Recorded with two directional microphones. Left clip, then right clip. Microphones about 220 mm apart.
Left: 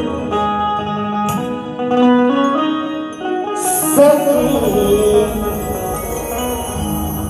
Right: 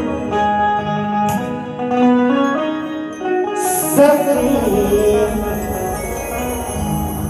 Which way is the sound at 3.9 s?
25° left (ahead or behind).